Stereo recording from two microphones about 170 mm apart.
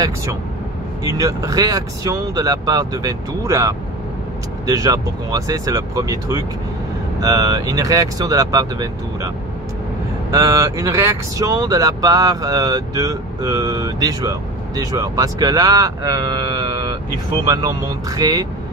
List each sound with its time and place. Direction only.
1.0 s speech: 20° right (ahead or behind)
10.3 s speech: 20° right (ahead or behind)